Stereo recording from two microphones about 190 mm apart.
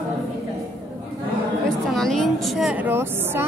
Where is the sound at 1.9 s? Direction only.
Centre (ahead or behind).